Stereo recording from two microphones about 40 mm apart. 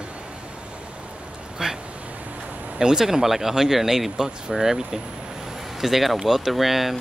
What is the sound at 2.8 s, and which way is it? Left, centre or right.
Speech, centre.